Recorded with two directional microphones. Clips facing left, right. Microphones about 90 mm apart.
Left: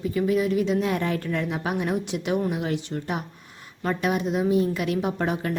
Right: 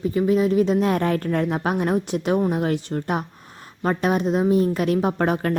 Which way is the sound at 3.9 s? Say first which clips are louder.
Right 4 dB; 40° right (ahead or behind).